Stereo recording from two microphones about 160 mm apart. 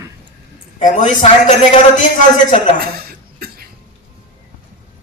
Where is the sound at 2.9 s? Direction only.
70° right (ahead or behind).